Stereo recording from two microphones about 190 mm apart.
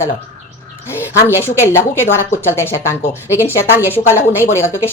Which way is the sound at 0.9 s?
15° left (ahead or behind).